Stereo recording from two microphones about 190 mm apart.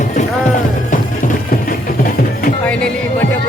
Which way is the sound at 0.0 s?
40° left (ahead or behind).